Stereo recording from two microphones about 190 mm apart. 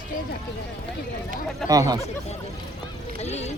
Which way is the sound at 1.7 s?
20° right (ahead or behind).